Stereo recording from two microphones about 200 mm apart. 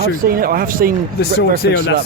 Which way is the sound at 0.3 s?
45° right (ahead or behind).